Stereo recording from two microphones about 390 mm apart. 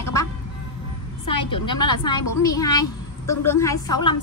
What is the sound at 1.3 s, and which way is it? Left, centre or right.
A woman's voice, centre.